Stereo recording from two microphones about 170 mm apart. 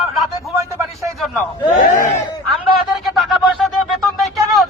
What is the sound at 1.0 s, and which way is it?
Speech, centre (ahead or behind).